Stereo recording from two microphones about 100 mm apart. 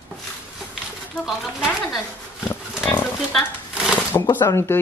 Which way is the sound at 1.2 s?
Centre (ahead or behind).